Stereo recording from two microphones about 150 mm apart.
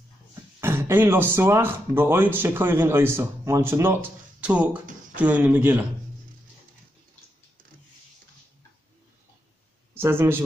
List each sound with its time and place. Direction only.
0.6 s speech: 15° right (ahead or behind)
9.9 s speech: 15° right (ahead or behind)